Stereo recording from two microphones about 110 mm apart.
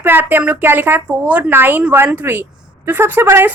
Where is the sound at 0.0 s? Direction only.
20° right (ahead or behind).